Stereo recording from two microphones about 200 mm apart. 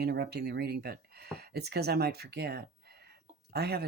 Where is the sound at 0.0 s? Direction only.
55° right (ahead or behind).